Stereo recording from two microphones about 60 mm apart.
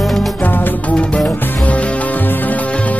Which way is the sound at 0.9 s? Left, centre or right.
Left.